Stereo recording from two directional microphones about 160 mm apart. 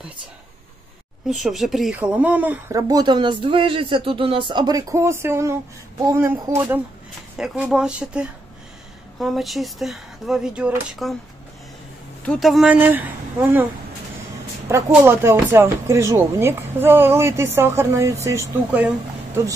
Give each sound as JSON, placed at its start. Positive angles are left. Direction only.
{"t": 1.3, "sound": "speech", "side_deg": 0}
{"t": 2.7, "sound": "speech", "side_deg": -25}
{"t": 12.3, "sound": "speech", "side_deg": 0}
{"t": 12.7, "sound": "speech", "side_deg": -10}
{"t": 14.9, "sound": "speech", "side_deg": -15}